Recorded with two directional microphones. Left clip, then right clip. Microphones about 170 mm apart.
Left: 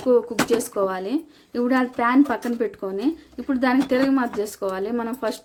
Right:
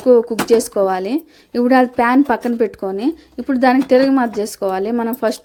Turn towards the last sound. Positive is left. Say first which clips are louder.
# right 7 dB
turn(degrees=-35)  # may be behind; listen again after turning